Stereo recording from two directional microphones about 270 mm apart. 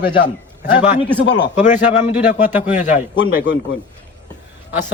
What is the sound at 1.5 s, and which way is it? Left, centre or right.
A man's voice, left.